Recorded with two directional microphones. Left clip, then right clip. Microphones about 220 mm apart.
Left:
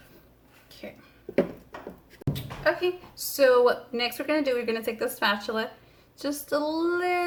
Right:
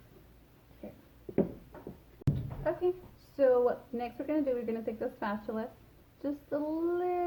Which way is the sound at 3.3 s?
10° left (ahead or behind).